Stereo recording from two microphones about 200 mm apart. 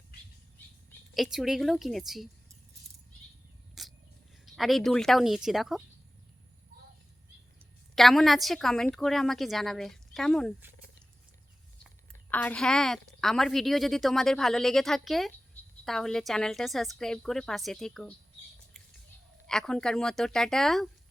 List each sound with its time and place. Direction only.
1.1 s a woman's voice: centre (ahead or behind)
3.8 s wild animals: centre (ahead or behind)
4.4 s a woman's voice: centre (ahead or behind)
7.9 s a woman's voice: centre (ahead or behind)
12.3 s a woman's voice: 5° left (ahead or behind)
19.5 s a woman's voice: 5° left (ahead or behind)